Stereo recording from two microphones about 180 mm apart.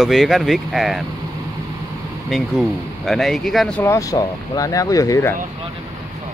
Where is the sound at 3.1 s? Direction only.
Centre (ahead or behind).